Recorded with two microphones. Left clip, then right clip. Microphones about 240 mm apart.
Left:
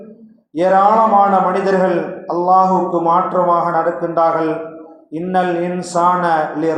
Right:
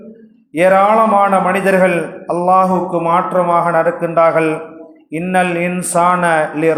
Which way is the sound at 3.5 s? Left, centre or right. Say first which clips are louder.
Right 1 dB; right.